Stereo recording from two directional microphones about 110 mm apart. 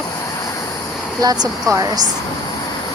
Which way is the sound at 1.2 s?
40° right (ahead or behind).